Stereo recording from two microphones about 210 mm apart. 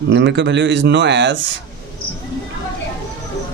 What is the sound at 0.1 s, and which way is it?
Speech, 55° right (ahead or behind).